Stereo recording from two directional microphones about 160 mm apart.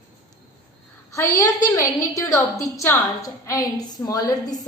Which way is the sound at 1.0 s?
20° left (ahead or behind).